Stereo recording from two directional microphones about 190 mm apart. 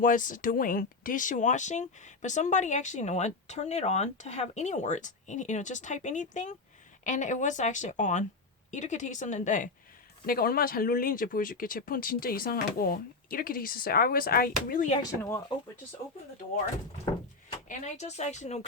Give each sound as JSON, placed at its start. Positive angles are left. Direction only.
{"t": 0.0, "sound": "speech", "side_deg": 45}
{"t": 10.2, "sound": "speech", "side_deg": 50}
{"t": 14.9, "sound": "speech", "side_deg": 15}
{"t": 17.7, "sound": "speech", "side_deg": 40}